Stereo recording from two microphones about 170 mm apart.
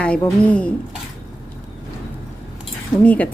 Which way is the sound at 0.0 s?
5° left (ahead or behind).